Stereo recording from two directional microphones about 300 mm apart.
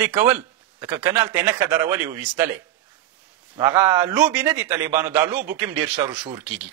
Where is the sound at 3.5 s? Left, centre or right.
Centre.